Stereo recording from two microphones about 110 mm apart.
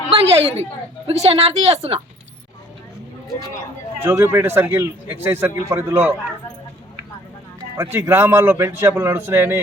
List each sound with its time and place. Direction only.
0.1 s a woman's voice: 65° right (ahead or behind)
4.0 s a man's voice: 25° right (ahead or behind)
7.9 s a man's voice: 20° right (ahead or behind)